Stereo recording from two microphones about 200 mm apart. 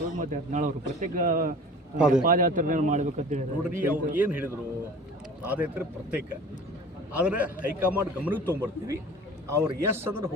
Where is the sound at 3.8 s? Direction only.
10° right (ahead or behind).